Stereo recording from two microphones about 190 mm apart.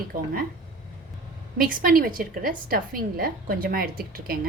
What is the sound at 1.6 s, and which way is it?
A woman's voice, 45° right (ahead or behind).